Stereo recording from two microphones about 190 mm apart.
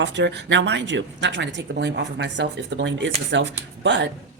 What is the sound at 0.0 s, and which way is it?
Speech, 65° right (ahead or behind).